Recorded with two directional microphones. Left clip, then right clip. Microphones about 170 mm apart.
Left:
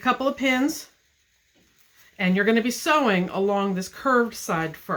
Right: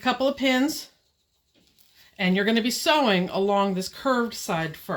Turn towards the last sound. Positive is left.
turn(degrees=-40)  # may be behind; listen again after turning